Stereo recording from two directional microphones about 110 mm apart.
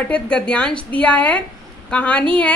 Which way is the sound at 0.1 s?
10° left (ahead or behind).